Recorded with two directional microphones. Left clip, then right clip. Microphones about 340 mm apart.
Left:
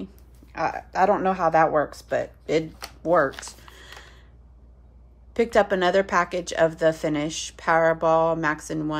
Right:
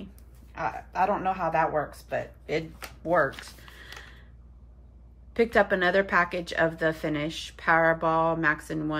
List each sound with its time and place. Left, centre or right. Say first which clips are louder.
0.5 s speech: left 5 dB; centre
5.3 s a woman's voice: left 2 dB; centre